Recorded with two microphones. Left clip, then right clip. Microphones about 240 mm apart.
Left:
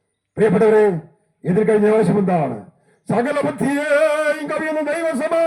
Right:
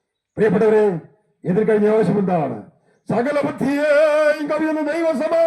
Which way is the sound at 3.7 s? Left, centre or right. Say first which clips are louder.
Right 2 dB; centre.